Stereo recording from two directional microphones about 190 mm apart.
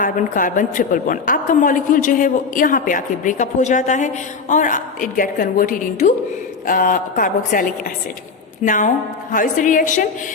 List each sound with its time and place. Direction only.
0.0 s a woman's voice: 45° left (ahead or behind)